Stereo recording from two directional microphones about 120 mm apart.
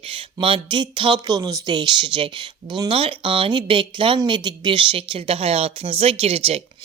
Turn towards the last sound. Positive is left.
turn(degrees=-55)  # may be behind; listen again after turning